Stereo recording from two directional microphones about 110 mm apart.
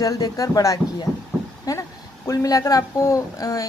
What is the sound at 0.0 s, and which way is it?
Speech, 30° left (ahead or behind).